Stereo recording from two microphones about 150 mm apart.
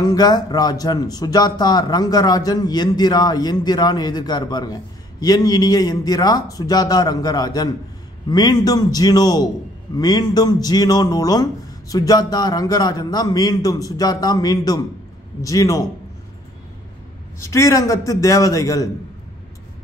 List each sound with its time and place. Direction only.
0.0 s speech: 25° left (ahead or behind)
17.4 s speech: 20° left (ahead or behind)